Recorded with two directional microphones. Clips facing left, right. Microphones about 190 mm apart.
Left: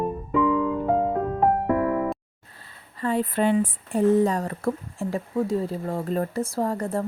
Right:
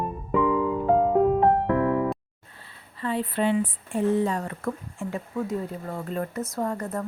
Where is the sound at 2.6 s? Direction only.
45° left (ahead or behind).